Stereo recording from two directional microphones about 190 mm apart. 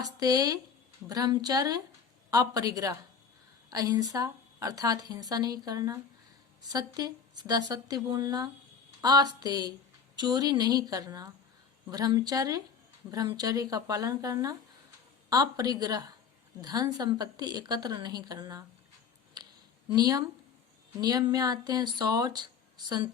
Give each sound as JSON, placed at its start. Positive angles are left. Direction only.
{"t": 0.0, "sound": "speech", "side_deg": -20}
{"t": 19.4, "sound": "a sound", "side_deg": -20}
{"t": 19.9, "sound": "speech", "side_deg": -20}